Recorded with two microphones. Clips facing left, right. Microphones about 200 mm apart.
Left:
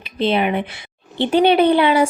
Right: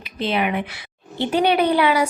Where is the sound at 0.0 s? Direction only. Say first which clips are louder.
Left 4 dB; 30° left (ahead or behind).